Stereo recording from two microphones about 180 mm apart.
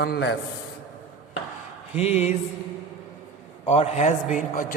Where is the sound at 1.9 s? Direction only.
35° left (ahead or behind).